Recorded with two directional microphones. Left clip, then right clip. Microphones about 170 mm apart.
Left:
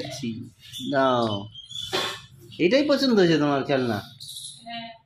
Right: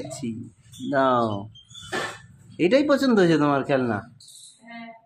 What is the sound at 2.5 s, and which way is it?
Speech, 5° right (ahead or behind).